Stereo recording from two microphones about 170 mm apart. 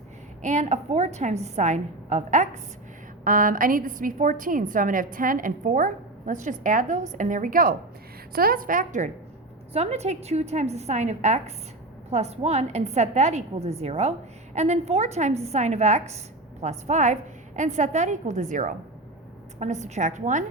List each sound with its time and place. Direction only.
0.4 s a woman's voice: 45° right (ahead or behind)